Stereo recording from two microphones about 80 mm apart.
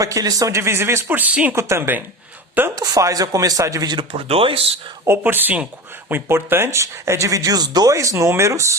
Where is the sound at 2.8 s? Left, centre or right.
Right.